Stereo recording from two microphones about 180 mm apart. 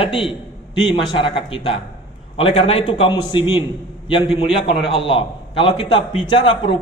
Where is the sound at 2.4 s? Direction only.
35° left (ahead or behind).